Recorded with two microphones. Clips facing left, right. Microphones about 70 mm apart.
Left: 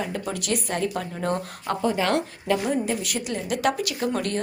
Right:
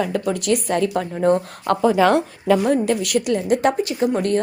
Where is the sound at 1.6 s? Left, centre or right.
Right.